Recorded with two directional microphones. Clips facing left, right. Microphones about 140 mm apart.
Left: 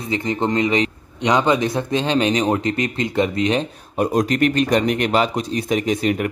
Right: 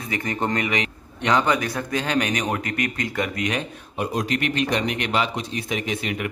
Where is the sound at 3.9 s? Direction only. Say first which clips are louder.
Left 7 dB; 45° left (ahead or behind).